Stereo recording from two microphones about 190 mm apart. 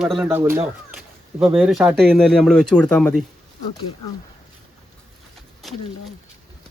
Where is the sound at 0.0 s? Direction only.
Centre (ahead or behind).